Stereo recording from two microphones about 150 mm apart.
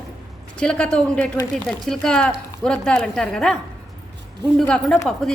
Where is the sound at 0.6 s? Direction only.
5° left (ahead or behind).